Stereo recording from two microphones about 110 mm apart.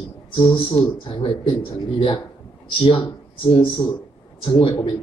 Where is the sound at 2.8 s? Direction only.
55° left (ahead or behind).